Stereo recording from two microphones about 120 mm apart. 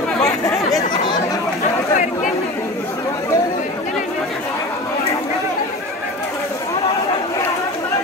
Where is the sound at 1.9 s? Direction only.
90° left.